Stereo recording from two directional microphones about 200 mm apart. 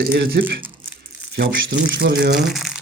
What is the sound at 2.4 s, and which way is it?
Speech, centre (ahead or behind).